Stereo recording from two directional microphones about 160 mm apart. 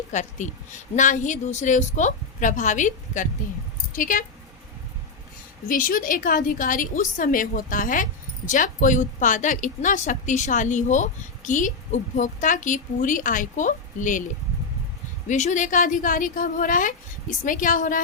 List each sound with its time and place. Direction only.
0.1 s a woman's voice: 50° left (ahead or behind)
5.6 s a woman's voice: 55° left (ahead or behind)
15.3 s a woman's voice: 50° left (ahead or behind)